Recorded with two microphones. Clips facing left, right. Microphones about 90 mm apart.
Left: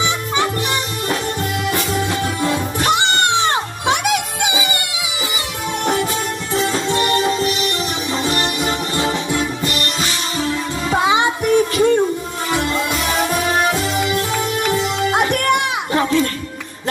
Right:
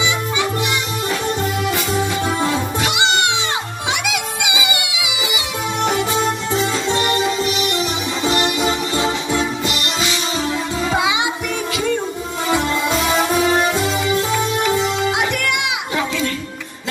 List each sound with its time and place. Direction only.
0.0 s music: 45° left (ahead or behind)
3.3 s music: 50° left (ahead or behind)
6.9 s music: 25° right (ahead or behind)
8.3 s music: 20° right (ahead or behind)
11.0 s child singing: 45° left (ahead or behind)
13.7 s music: 25° right (ahead or behind)
15.0 s music: 45° left (ahead or behind)